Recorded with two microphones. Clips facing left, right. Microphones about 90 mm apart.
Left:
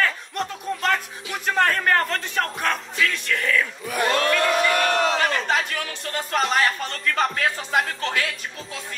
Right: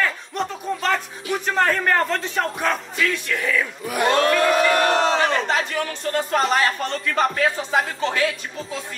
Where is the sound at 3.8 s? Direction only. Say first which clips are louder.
Right 5 dB; 35° right (ahead or behind).